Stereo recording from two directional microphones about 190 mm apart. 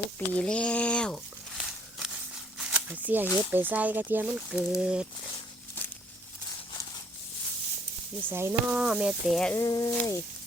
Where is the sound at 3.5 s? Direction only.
10° right (ahead or behind).